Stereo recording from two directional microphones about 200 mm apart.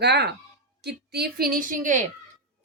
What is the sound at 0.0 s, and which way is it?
A woman's voice, 55° right (ahead or behind).